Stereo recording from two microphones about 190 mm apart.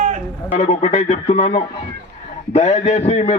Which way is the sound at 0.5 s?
35° left (ahead or behind).